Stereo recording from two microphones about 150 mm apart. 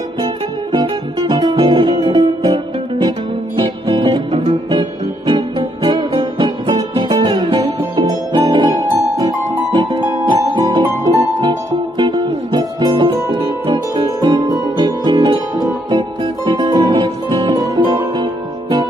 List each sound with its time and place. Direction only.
0.2 s music: 30° right (ahead or behind)
16.4 s guitar: 25° right (ahead or behind)